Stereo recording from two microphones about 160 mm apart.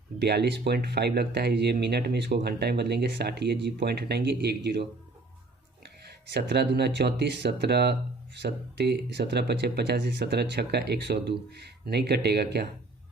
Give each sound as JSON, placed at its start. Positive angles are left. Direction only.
{"t": 0.2, "sound": "speech", "side_deg": -90}
{"t": 6.1, "sound": "speech", "side_deg": -90}